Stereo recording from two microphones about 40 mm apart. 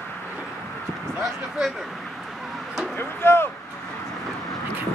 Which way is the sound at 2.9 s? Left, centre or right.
Left.